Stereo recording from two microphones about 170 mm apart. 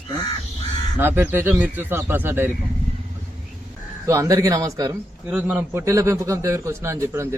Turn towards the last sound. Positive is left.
turn(degrees=-15)  # may be behind; listen again after turning